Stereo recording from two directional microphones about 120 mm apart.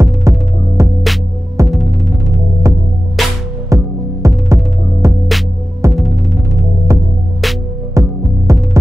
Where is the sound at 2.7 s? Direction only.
25° right (ahead or behind).